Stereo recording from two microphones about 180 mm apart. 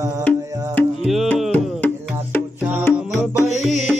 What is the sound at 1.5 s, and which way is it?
Music, 10° left (ahead or behind).